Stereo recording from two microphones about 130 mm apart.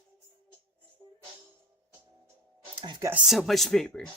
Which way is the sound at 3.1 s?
Centre (ahead or behind).